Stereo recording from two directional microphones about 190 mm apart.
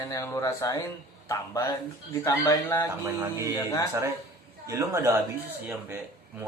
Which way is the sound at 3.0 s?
10° right (ahead or behind).